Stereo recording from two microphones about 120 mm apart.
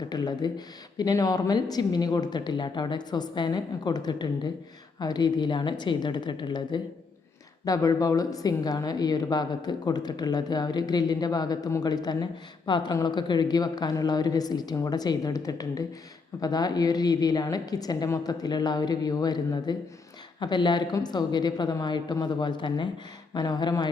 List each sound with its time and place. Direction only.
0.1 s a woman's voice: 35° left (ahead or behind)